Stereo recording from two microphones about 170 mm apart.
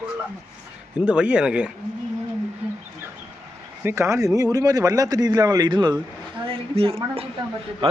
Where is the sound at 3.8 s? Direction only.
15° right (ahead or behind).